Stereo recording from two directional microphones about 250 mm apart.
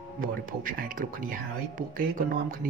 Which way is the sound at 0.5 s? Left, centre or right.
Right.